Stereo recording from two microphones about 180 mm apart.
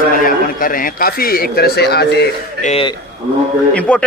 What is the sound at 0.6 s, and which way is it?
Speech, 50° left (ahead or behind).